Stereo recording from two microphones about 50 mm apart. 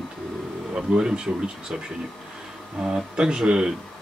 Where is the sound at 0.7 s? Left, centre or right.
Centre.